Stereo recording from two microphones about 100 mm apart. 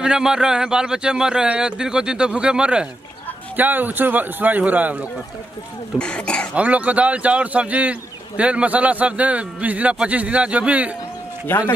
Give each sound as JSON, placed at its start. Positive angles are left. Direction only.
{"t": 0.0, "sound": "a man's voice", "side_deg": -5}
{"t": 5.9, "sound": "speech", "side_deg": 10}
{"t": 6.5, "sound": "a man's voice", "side_deg": -15}
{"t": 11.4, "sound": "a man's voice", "side_deg": 20}